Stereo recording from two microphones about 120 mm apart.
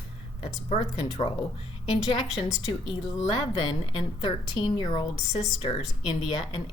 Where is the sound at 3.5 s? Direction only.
45° left (ahead or behind).